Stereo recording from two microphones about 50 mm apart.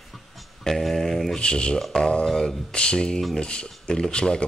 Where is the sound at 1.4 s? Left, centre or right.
Centre.